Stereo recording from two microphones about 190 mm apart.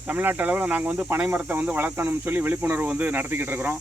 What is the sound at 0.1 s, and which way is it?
Speech, 10° right (ahead or behind).